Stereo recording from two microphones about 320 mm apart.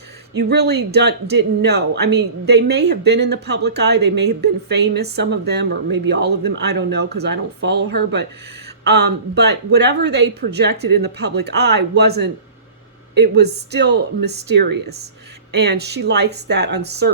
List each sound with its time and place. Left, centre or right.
0.3 s speech: right